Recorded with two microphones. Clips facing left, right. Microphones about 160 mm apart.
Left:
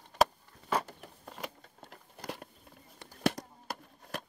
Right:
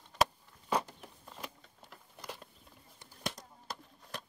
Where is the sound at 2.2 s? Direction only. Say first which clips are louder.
Left 5 dB; 65° left (ahead or behind).